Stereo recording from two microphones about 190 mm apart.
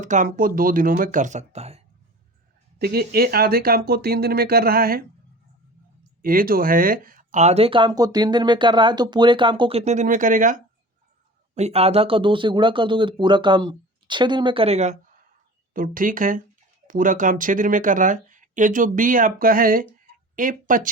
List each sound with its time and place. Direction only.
0.0 s speech: 40° right (ahead or behind)
2.7 s speech: 55° right (ahead or behind)
6.2 s speech: 50° right (ahead or behind)
15.7 s speech: 45° right (ahead or behind)